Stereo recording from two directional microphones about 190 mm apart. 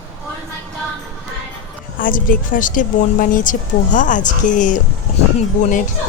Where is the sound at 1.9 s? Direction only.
45° left (ahead or behind).